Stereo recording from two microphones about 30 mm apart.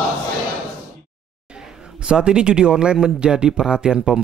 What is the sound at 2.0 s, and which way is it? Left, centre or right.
Speech, right.